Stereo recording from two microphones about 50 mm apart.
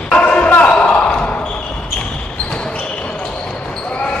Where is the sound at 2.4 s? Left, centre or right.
Centre.